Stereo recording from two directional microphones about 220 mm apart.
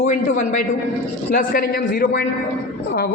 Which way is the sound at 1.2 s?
40° left (ahead or behind).